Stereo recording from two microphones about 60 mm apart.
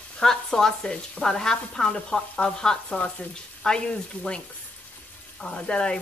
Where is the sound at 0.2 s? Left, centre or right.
Centre.